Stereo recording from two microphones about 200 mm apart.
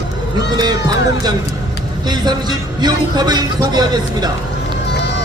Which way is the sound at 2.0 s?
20° right (ahead or behind).